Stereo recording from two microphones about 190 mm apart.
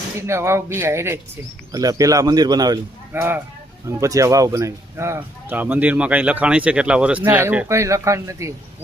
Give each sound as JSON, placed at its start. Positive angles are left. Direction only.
{"t": 0.2, "sound": "speech", "side_deg": -15}